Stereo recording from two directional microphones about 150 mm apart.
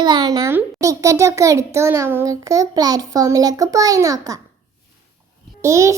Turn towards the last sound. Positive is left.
turn(degrees=-20)  # may be behind; listen again after turning